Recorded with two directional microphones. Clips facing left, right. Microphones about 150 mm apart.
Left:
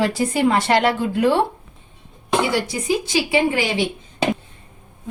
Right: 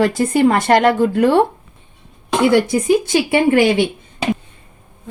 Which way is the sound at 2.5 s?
55° right (ahead or behind).